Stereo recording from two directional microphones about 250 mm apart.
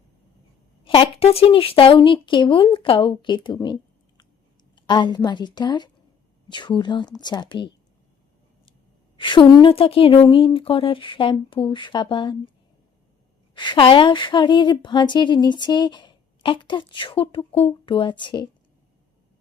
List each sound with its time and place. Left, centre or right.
0.9 s a woman's voice: left
9.1 s a woman's voice: centre
13.5 s a woman's voice: centre